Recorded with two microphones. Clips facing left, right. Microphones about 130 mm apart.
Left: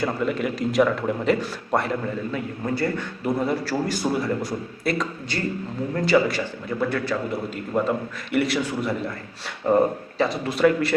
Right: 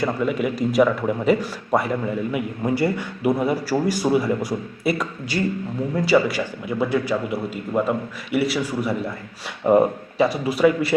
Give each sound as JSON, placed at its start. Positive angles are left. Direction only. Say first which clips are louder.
{"t": 0.0, "sound": "a man's voice", "louder": "right 2 dB", "side_deg": -5}